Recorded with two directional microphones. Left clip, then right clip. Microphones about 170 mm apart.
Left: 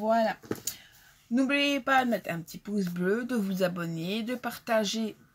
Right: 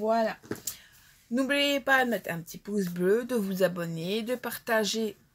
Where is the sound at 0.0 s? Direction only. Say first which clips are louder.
Left 1 dB; 5° left (ahead or behind).